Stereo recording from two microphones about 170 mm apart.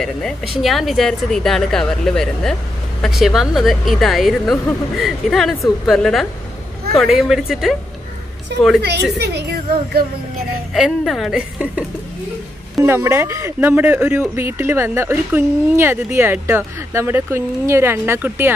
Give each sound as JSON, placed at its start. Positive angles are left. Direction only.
{"t": 0.0, "sound": "a woman's voice", "side_deg": 0}
{"t": 8.5, "sound": "a woman's voice", "side_deg": -80}
{"t": 10.7, "sound": "a woman's voice", "side_deg": 0}
{"t": 12.8, "sound": "speech", "side_deg": -15}